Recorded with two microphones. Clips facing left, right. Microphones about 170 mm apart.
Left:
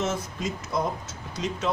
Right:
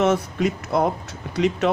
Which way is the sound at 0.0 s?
65° right (ahead or behind).